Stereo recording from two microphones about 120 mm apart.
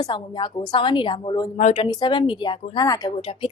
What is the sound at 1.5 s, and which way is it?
Speech, 80° left.